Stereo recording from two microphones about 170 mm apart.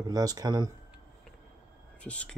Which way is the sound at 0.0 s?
20° right (ahead or behind).